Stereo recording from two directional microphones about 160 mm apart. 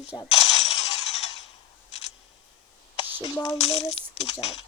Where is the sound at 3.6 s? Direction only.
40° left (ahead or behind).